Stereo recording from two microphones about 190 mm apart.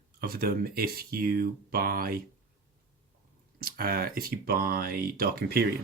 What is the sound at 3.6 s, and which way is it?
Speech, 50° right (ahead or behind).